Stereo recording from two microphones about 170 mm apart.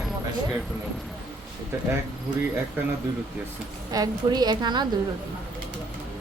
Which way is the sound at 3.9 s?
20° right (ahead or behind).